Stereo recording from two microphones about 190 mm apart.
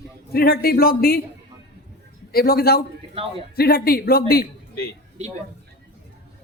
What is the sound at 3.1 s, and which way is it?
Speech, 30° right (ahead or behind).